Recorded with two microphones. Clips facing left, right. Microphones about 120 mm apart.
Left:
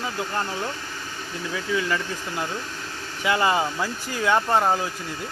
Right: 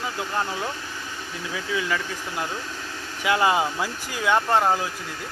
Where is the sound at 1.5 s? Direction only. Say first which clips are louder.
Left 1 dB; 5° right (ahead or behind).